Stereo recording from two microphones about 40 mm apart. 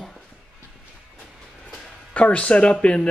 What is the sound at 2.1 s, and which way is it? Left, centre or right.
Speech, left.